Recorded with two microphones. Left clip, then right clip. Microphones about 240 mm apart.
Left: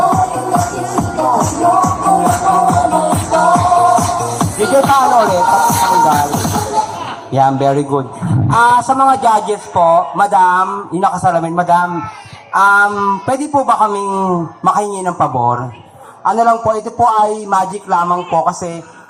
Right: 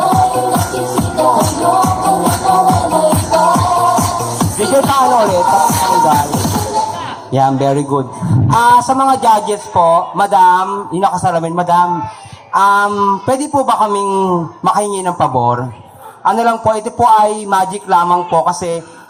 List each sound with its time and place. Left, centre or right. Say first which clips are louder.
0.0 s music: right 1 dB; right
7.3 s speech: left 1 dB; right